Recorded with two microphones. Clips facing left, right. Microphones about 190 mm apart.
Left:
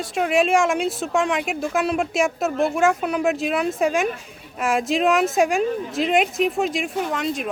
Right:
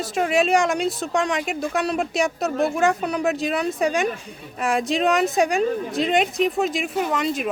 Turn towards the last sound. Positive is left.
turn(degrees=0)  # may be behind; listen again after turning